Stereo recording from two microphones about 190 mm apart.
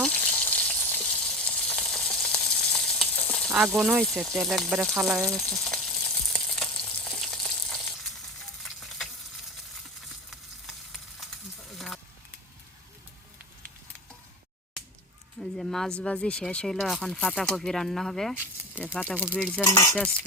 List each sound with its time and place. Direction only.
0.0 s frying: 5° left (ahead or behind)
3.5 s speech: 5° right (ahead or behind)
4.0 s frying: centre (ahead or behind)
8.6 s stir: centre (ahead or behind)
10.2 s frying: centre (ahead or behind)
15.4 s a sound: 5° left (ahead or behind)
16.0 s speech: 5° left (ahead or behind)
18.8 s stir: 10° left (ahead or behind)